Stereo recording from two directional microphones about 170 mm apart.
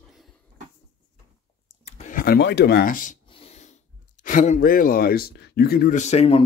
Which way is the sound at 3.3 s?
40° left (ahead or behind).